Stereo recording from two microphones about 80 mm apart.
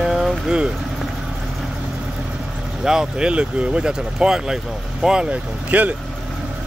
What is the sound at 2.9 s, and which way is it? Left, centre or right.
Speech, centre.